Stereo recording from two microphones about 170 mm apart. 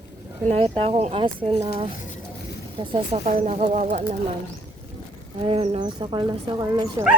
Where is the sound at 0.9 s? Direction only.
40° right (ahead or behind).